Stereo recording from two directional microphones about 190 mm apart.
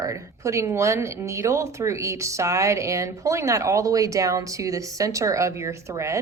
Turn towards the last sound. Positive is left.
turn(degrees=-15)  # may be behind; listen again after turning